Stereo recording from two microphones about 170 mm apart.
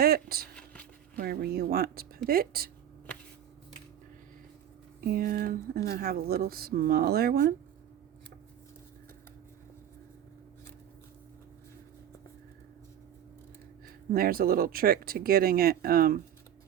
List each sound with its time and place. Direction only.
0.0 s speech: 65° right (ahead or behind)
0.5 s a sound: 5° left (ahead or behind)
1.1 s speech: 65° right (ahead or behind)
4.9 s speech: 60° right (ahead or behind)
14.1 s speech: 60° right (ahead or behind)